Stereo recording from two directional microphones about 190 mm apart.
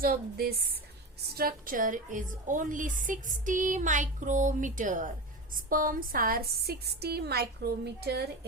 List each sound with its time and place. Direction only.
0.0 s a woman's voice: 50° right (ahead or behind)